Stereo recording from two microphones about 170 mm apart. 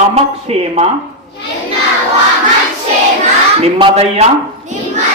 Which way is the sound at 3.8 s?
35° right (ahead or behind).